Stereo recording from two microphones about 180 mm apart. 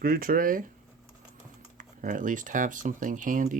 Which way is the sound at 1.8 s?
45° right (ahead or behind).